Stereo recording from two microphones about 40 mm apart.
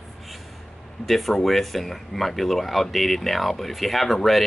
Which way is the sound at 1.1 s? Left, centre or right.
Centre.